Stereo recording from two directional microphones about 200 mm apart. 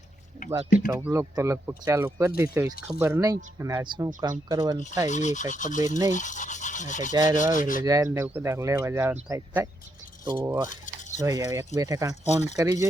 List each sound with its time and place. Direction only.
0.9 s speech: 15° right (ahead or behind)
5.0 s speech: 35° left (ahead or behind)
7.1 s rub: 20° right (ahead or behind)
7.5 s speech: 40° left (ahead or behind)
7.9 s speech: 15° right (ahead or behind)
10.7 s cutlery: 40° left (ahead or behind)
11.2 s speech: 15° right (ahead or behind)
12.2 s speech: 35° left (ahead or behind)
12.5 s speech: 15° right (ahead or behind)